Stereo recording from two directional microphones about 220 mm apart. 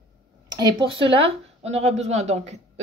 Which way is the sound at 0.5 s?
20° right (ahead or behind).